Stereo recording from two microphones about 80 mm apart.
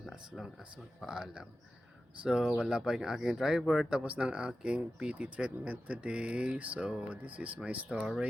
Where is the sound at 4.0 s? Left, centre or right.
Centre.